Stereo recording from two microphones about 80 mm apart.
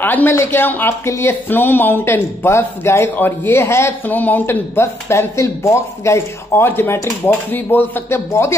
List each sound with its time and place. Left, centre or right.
0.0 s speech: left
4.1 s speech: left